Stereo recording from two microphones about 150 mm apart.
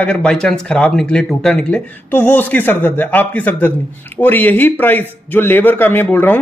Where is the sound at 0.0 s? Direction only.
5° left (ahead or behind).